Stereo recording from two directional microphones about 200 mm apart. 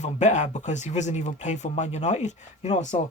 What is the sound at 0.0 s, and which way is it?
Speech, 35° left (ahead or behind).